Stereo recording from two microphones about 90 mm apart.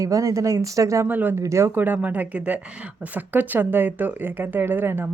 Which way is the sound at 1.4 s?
30° right (ahead or behind).